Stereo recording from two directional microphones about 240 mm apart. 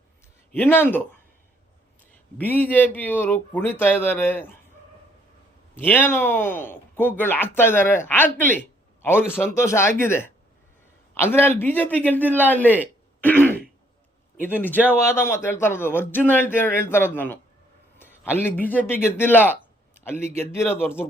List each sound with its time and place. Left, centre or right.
0.5 s speech: centre
2.4 s speech: centre
5.8 s a man's voice: centre